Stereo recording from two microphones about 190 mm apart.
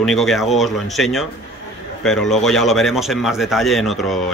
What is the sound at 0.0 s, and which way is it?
Speech, centre (ahead or behind).